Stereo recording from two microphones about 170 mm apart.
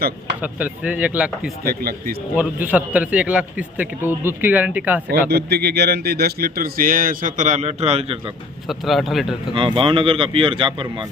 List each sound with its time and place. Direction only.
0.4 s a man's voice: 10° right (ahead or behind)
1.6 s speech: 60° right (ahead or behind)
2.3 s a man's voice: 10° right (ahead or behind)
5.3 s speech: 70° right (ahead or behind); by 8.2 s 35° right (ahead or behind)
8.6 s speech: centre (ahead or behind)
9.6 s speech: 30° right (ahead or behind)